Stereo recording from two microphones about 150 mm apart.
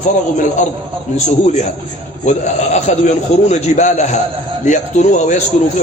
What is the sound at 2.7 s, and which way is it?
A man's voice, 50° left (ahead or behind).